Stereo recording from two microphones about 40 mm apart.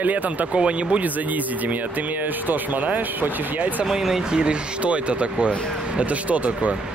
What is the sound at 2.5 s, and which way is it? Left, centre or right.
Speech, right.